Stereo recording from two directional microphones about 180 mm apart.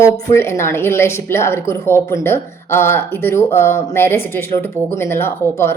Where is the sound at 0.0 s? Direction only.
15° left (ahead or behind).